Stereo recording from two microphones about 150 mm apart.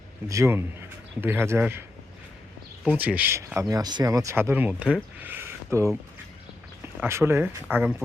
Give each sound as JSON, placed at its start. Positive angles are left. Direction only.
{"t": 0.3, "sound": "a man's voice", "side_deg": -20}
{"t": 2.8, "sound": "speech", "side_deg": -10}
{"t": 7.0, "sound": "speech", "side_deg": -15}